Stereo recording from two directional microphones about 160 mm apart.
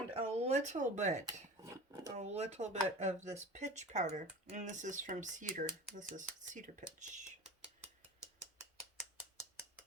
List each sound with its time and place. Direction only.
0.1 s speech: 40° right (ahead or behind)
1.3 s a sound: 20° right (ahead or behind)
2.1 s speech: 45° right (ahead or behind)